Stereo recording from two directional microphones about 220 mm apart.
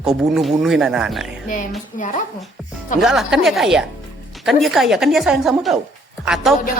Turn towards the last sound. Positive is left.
turn(degrees=-5)  # may be behind; listen again after turning